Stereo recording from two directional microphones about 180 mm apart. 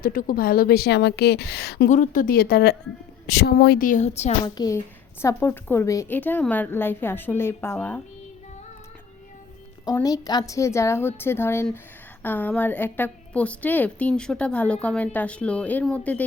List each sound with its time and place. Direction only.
0.0 s a woman's voice: 50° left (ahead or behind)
1.9 s a woman's voice: 45° left (ahead or behind)
4.4 s a woman's voice: 20° left (ahead or behind)
9.8 s a woman's voice: 20° left (ahead or behind)